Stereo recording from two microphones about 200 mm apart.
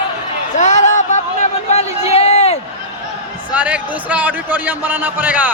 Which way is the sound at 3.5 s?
5° right (ahead or behind).